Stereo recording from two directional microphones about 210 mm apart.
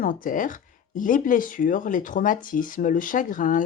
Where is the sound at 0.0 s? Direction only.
40° left (ahead or behind).